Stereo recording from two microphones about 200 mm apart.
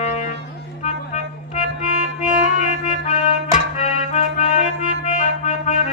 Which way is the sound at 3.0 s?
35° left (ahead or behind).